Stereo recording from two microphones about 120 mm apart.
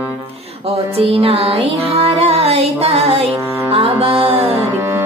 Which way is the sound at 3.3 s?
20° right (ahead or behind).